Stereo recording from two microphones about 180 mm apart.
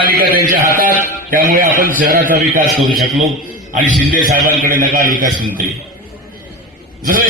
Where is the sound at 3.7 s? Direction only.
45° right (ahead or behind).